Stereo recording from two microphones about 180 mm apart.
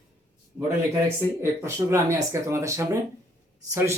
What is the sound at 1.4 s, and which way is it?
Speech, 15° right (ahead or behind).